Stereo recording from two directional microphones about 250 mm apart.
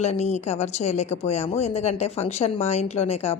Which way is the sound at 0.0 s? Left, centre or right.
Left.